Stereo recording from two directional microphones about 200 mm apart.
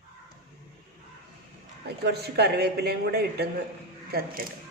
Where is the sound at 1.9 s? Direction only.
55° right (ahead or behind).